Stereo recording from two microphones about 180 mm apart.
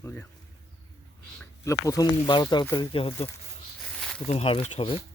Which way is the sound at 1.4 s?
15° left (ahead or behind).